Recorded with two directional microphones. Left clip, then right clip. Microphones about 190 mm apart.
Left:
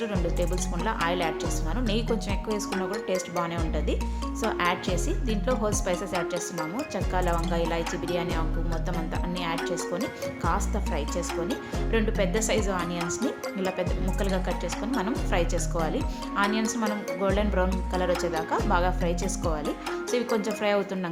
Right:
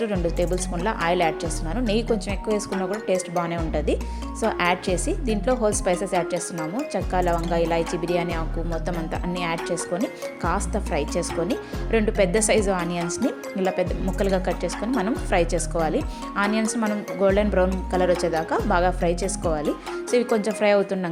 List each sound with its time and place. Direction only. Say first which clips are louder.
0.0 s speech: right 5 dB; 20° right (ahead or behind)
9.4 s speech: right 2 dB; 25° right (ahead or behind)